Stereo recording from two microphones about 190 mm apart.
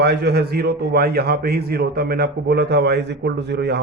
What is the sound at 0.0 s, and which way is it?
Speech, 60° right (ahead or behind).